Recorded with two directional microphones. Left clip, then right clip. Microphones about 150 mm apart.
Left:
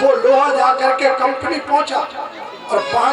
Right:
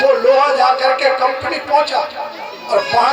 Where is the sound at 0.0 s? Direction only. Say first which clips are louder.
Right 1 dB; 50° left (ahead or behind).